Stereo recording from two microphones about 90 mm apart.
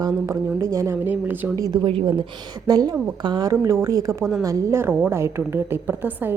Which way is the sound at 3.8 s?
40° right (ahead or behind).